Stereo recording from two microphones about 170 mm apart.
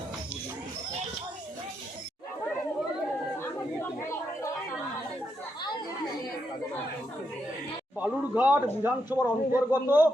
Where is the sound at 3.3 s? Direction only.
15° left (ahead or behind).